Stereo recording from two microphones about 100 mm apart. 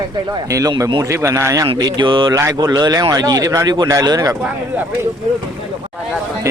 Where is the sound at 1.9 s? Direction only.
50° right (ahead or behind).